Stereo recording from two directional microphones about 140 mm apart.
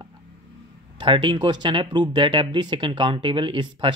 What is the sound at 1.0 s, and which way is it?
Speech, 35° right (ahead or behind).